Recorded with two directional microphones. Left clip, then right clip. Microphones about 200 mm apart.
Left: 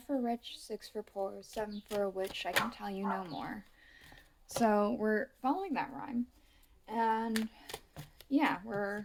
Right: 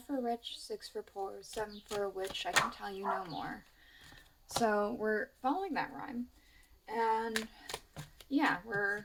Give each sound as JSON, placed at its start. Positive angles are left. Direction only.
{"t": 0.1, "sound": "a woman's voice", "side_deg": 30}
{"t": 4.6, "sound": "a woman's voice", "side_deg": 35}
{"t": 8.3, "sound": "speech", "side_deg": 30}